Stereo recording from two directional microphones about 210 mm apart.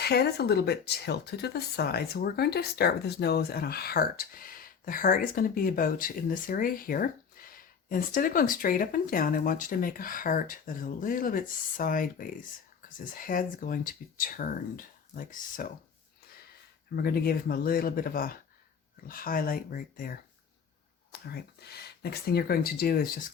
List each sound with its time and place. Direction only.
0.0 s speech: 50° left (ahead or behind)
16.9 s speech: 45° left (ahead or behind)